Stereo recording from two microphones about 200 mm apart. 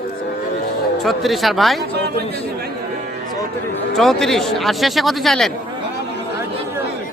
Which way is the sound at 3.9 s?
Centre (ahead or behind).